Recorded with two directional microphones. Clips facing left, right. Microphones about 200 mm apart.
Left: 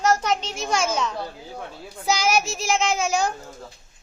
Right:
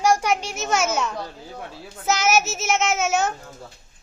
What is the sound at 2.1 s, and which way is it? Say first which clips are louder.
Child singing: right 1 dB; 5° right (ahead or behind).